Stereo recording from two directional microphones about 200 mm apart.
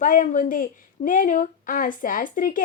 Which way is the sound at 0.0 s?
40° left (ahead or behind).